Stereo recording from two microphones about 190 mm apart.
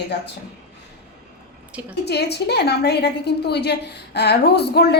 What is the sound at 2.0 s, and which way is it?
A woman's voice, 60° left (ahead or behind).